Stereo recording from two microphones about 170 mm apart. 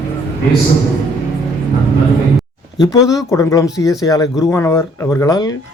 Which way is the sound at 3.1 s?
20° left (ahead or behind).